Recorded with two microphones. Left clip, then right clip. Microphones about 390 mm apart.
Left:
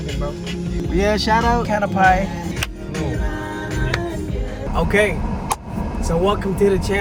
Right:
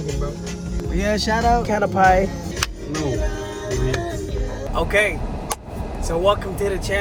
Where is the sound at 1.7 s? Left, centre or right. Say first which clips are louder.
Left 1 dB; centre.